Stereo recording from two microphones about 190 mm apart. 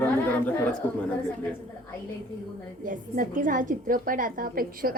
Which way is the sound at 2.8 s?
45° right (ahead or behind).